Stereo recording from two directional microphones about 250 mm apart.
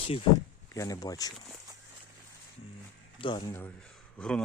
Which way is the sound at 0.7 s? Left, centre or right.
Centre.